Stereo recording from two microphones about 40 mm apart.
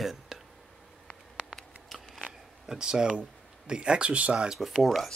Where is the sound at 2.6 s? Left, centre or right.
Centre.